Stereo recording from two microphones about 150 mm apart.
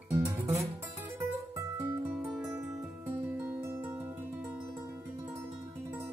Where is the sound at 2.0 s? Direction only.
10° right (ahead or behind).